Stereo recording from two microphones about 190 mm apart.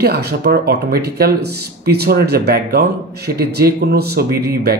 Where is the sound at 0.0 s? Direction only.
55° right (ahead or behind).